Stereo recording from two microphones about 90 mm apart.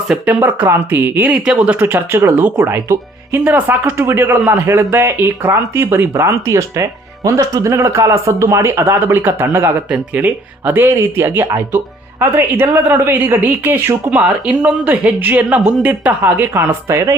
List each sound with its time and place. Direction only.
0.1 s speech: 15° right (ahead or behind)
16.9 s speech: 35° right (ahead or behind)